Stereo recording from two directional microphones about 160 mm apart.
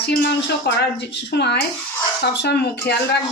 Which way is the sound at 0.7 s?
90° left.